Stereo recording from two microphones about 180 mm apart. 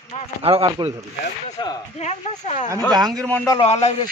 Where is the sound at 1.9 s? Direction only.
40° left (ahead or behind).